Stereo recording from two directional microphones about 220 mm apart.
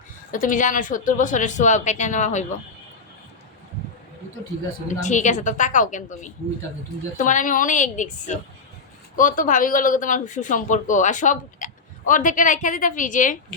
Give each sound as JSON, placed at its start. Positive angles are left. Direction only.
{"t": 0.3, "sound": "speech", "side_deg": 35}
{"t": 4.9, "sound": "speech", "side_deg": 35}